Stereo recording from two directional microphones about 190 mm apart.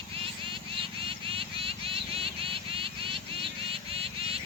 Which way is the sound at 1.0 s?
30° right (ahead or behind).